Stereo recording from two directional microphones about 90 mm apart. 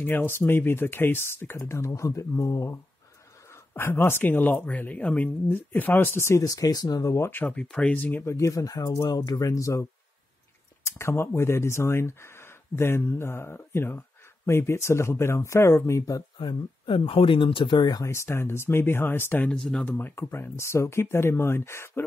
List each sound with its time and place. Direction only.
0.0 s speech: 25° left (ahead or behind)
3.7 s speech: 25° left (ahead or behind); by 7.2 s 40° left (ahead or behind)
7.2 s speech: 20° left (ahead or behind)
7.5 s speech: 10° left (ahead or behind)
8.3 s speech: 35° left (ahead or behind)
11.0 s speech: 30° left (ahead or behind)
16.3 s speech: 65° left (ahead or behind)
18.0 s speech: 30° left (ahead or behind); by 19.9 s 10° left (ahead or behind)
19.9 s speech: 20° left (ahead or behind)